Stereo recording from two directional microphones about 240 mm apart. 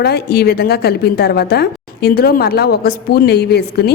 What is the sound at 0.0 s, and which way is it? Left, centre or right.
A woman's voice, left.